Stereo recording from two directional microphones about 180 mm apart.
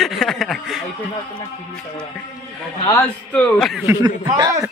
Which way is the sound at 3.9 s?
20° right (ahead or behind).